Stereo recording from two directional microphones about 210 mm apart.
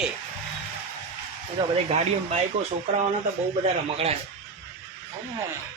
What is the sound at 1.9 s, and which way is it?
Speech, 30° right (ahead or behind).